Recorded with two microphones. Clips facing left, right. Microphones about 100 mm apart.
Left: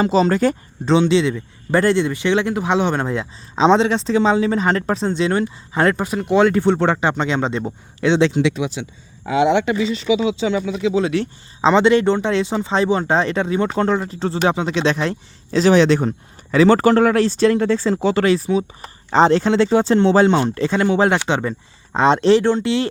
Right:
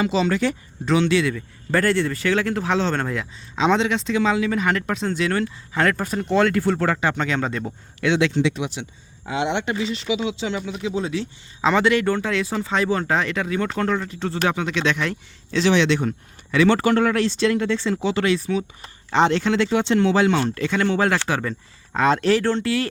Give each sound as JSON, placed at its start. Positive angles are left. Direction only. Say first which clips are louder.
{"t": 0.0, "sound": "speech", "louder": "left 5 dB", "side_deg": 40}
{"t": 0.9, "sound": "speech", "louder": "left 4 dB", "side_deg": 25}
{"t": 6.1, "sound": "speech", "louder": "left 4 dB", "side_deg": 10}
{"t": 10.8, "sound": "speech", "louder": "left 7 dB", "side_deg": 85}
{"t": 11.6, "sound": "speech", "louder": "left 5 dB", "side_deg": 25}